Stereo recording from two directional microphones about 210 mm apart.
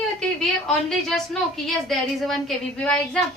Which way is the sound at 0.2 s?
Centre (ahead or behind).